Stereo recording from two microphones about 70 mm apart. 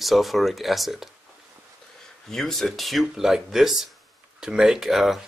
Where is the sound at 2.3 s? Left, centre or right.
Centre.